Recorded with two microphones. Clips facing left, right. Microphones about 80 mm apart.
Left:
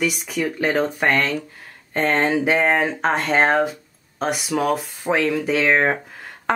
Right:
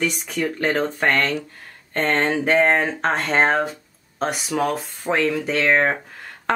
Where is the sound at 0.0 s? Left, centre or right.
Centre.